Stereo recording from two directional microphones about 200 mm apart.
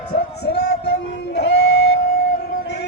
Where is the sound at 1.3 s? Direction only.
55° left (ahead or behind).